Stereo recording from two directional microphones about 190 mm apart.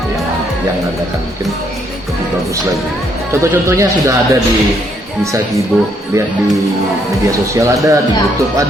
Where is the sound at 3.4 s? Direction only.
15° right (ahead or behind).